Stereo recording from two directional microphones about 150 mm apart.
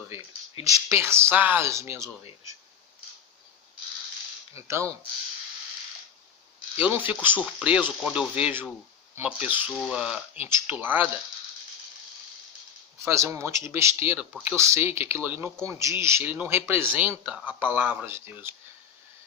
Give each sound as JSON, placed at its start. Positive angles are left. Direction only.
{"t": 0.6, "sound": "speech", "side_deg": -20}
{"t": 4.5, "sound": "speech", "side_deg": -20}
{"t": 6.7, "sound": "speech", "side_deg": -15}
{"t": 13.1, "sound": "speech", "side_deg": -20}